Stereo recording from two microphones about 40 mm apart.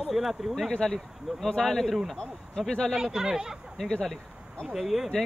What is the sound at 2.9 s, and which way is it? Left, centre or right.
Speech, centre.